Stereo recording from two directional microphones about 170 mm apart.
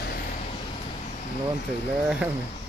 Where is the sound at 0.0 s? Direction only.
60° left (ahead or behind).